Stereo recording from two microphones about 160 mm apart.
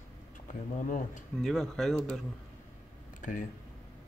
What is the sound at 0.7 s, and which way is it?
Speech, 55° left (ahead or behind).